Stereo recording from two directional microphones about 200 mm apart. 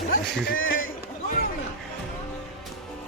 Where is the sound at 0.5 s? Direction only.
75° left (ahead or behind).